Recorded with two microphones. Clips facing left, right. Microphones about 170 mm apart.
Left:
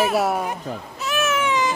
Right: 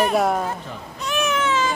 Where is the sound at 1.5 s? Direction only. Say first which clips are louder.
Even; 15° left (ahead or behind).